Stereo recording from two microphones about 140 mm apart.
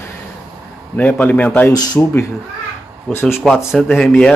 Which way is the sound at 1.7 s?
30° left (ahead or behind).